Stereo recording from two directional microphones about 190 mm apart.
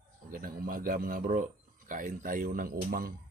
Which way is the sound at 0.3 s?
50° right (ahead or behind).